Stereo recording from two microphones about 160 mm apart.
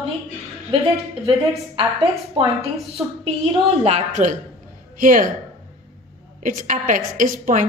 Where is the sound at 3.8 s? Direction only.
45° right (ahead or behind).